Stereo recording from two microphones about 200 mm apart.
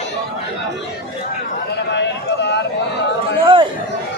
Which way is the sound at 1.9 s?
60° left (ahead or behind).